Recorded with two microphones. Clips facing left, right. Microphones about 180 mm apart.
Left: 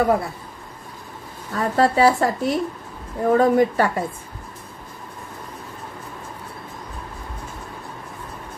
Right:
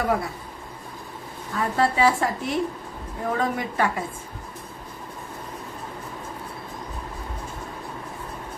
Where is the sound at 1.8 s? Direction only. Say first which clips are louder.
Left 5 dB; 40° left (ahead or behind).